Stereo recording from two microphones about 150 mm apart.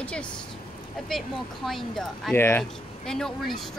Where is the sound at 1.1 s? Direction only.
Centre (ahead or behind).